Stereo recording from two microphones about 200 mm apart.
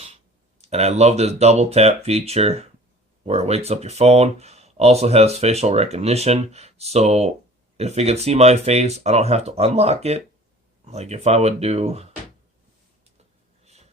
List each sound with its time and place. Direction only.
0.6 s speech: 30° right (ahead or behind)